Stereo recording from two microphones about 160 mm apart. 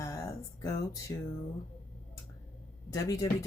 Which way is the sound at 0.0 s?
20° left (ahead or behind).